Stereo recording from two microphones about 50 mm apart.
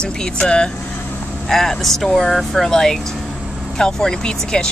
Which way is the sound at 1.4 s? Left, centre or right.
Centre.